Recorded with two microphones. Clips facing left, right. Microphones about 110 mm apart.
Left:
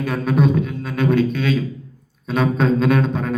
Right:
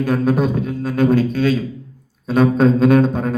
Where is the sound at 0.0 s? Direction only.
40° right (ahead or behind).